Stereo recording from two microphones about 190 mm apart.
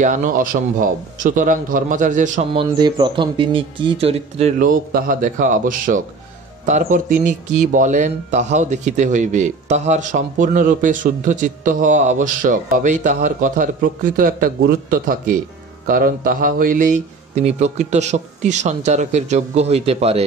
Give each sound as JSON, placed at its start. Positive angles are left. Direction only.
{"t": 0.0, "sound": "speech", "side_deg": -40}
{"t": 2.5, "sound": "speech", "side_deg": -25}
{"t": 4.6, "sound": "speech", "side_deg": -45}